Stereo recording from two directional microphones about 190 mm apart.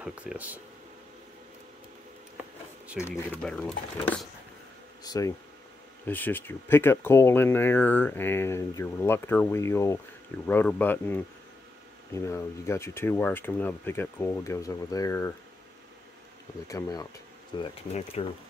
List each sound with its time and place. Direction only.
0.0 s speech: 5° right (ahead or behind)
3.0 s speech: 10° left (ahead or behind)
5.0 s speech: 20° left (ahead or behind)
16.6 s speech: 20° left (ahead or behind)
17.6 s speech: 35° left (ahead or behind)